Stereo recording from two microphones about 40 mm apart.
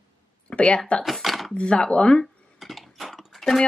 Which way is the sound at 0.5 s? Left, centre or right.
Left.